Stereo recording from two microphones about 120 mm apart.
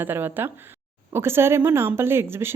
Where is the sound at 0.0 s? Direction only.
15° right (ahead or behind).